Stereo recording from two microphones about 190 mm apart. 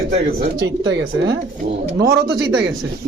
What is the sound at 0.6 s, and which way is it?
Speech, 75° right (ahead or behind).